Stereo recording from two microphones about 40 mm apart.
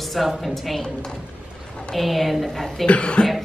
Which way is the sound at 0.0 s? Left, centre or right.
Centre.